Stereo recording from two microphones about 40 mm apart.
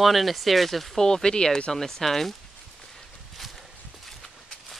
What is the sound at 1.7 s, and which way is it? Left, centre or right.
Speech, centre.